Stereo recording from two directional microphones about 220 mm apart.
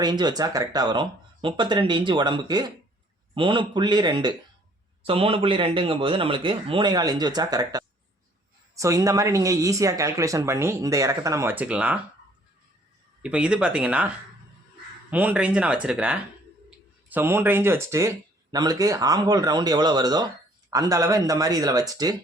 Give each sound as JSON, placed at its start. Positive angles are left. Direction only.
{"t": 0.0, "sound": "a man's voice", "side_deg": -20}
{"t": 13.2, "sound": "speech", "side_deg": -5}
{"t": 15.1, "sound": "speech", "side_deg": -5}